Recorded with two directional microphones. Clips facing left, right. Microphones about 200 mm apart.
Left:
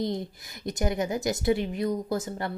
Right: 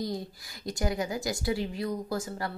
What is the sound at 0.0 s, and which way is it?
A woman's voice, 20° left (ahead or behind).